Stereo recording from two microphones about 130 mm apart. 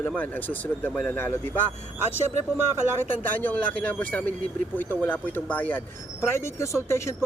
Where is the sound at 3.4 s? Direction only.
10° left (ahead or behind).